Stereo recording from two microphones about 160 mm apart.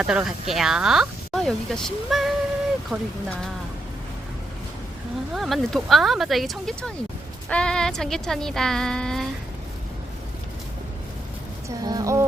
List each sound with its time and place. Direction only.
0.0 s speech: 5° right (ahead or behind)
5.3 s speech: centre (ahead or behind)
11.8 s speech: 25° right (ahead or behind)